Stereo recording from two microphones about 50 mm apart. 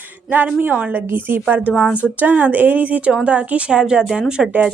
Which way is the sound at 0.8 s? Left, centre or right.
Right.